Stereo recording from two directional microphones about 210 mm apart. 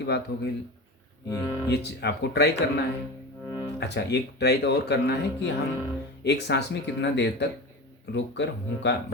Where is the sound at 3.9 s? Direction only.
50° left (ahead or behind).